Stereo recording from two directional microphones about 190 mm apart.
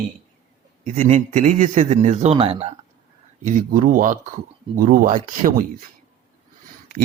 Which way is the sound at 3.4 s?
45° right (ahead or behind).